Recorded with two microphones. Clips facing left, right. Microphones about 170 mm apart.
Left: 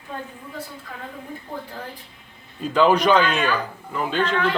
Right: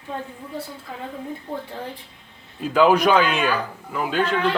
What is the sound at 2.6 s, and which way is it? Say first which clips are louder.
Speech: right 1 dB; 5° right (ahead or behind).